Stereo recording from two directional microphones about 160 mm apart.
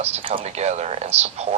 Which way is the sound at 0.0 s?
35° right (ahead or behind).